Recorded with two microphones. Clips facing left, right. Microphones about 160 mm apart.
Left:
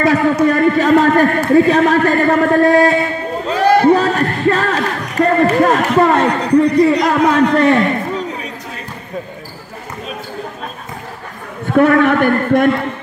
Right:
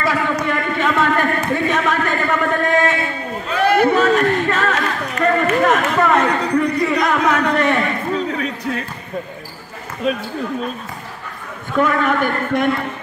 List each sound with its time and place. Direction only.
0.0 s a man's voice: 40° left (ahead or behind)
11.7 s a man's voice: 60° left (ahead or behind)